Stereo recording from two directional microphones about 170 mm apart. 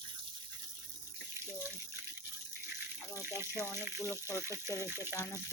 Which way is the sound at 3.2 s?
15° right (ahead or behind).